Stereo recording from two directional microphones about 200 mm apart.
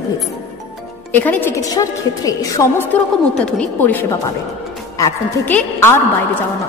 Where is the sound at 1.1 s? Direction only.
10° left (ahead or behind).